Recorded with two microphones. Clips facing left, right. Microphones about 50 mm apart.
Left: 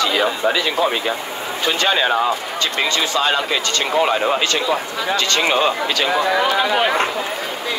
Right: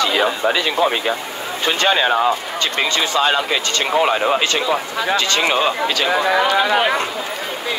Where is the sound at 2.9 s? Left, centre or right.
Right.